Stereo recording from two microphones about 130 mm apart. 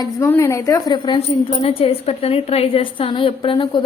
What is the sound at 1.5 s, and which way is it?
A woman's voice, 50° left (ahead or behind).